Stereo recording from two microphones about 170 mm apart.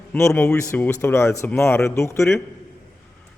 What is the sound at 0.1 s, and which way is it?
Speech, 15° left (ahead or behind).